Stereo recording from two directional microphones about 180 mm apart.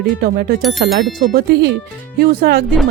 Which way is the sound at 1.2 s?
55° right (ahead or behind).